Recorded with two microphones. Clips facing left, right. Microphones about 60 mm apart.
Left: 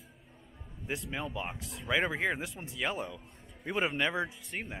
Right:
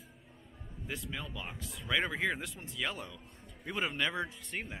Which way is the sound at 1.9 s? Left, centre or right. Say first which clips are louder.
Left 2 dB; centre.